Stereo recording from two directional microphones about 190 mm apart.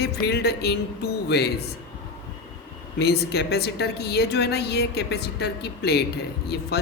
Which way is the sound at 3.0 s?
60° left (ahead or behind).